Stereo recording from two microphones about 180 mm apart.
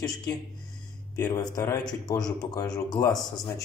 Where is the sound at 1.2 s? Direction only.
20° left (ahead or behind).